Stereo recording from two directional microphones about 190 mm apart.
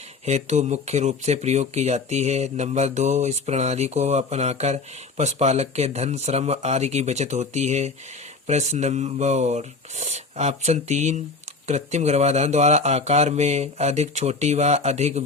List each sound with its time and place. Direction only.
0.3 s speech: 35° right (ahead or behind)